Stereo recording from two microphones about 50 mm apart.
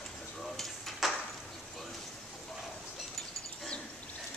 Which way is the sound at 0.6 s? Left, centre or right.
Centre.